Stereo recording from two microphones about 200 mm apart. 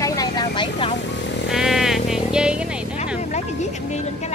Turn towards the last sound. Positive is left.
turn(degrees=35)  # may be behind; listen again after turning